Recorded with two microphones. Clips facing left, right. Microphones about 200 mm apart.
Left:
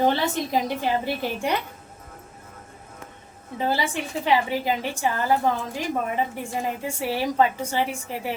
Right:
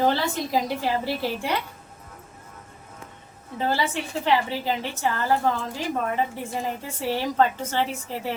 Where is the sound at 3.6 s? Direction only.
15° left (ahead or behind).